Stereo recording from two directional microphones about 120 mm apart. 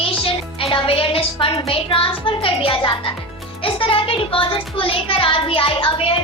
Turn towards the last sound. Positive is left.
turn(degrees=50)  # may be behind; listen again after turning